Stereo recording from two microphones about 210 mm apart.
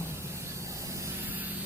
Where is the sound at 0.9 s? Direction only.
10° right (ahead or behind).